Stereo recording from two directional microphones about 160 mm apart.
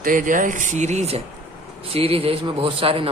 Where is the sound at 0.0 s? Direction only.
55° right (ahead or behind).